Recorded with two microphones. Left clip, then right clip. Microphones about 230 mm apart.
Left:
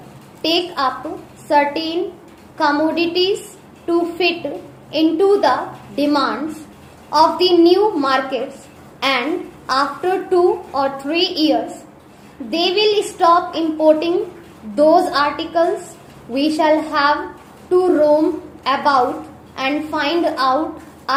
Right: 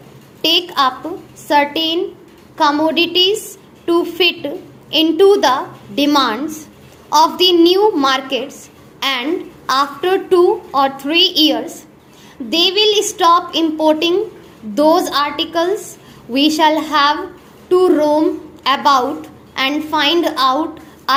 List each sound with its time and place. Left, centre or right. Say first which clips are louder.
0.4 s a woman's voice: right 4 dB; right